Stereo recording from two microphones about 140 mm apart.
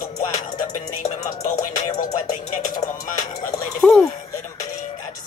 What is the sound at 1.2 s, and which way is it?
Music, 60° left (ahead or behind).